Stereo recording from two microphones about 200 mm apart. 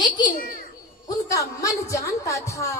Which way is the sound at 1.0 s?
15° left (ahead or behind).